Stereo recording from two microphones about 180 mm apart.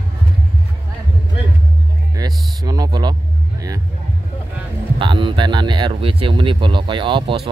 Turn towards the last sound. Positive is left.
turn(degrees=-25)  # may be behind; listen again after turning